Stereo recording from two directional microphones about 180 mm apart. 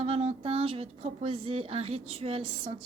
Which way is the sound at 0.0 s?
35° right (ahead or behind).